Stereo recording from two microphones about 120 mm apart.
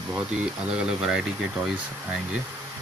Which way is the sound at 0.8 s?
5° right (ahead or behind).